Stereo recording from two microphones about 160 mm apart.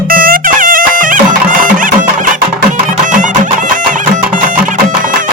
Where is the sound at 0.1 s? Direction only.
60° right (ahead or behind).